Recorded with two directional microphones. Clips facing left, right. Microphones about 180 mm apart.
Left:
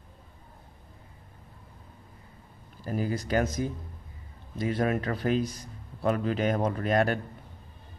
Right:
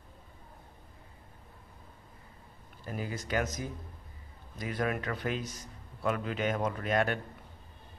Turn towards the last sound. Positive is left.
turn(degrees=40)  # may be behind; listen again after turning